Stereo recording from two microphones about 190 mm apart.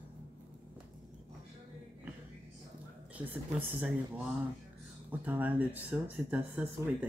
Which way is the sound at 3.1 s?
10° right (ahead or behind).